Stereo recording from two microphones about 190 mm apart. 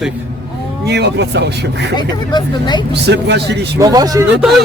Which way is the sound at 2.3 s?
20° left (ahead or behind).